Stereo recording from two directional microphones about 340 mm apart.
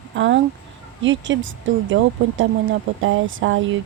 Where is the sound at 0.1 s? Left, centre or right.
Right.